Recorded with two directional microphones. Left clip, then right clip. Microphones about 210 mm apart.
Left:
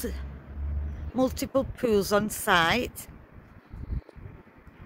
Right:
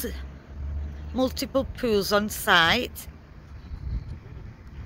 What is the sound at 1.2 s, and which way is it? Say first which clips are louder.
Speech: right 1 dB; 10° left (ahead or behind).